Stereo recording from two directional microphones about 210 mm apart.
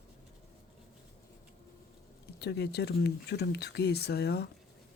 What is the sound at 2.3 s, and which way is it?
Speech, 50° left (ahead or behind).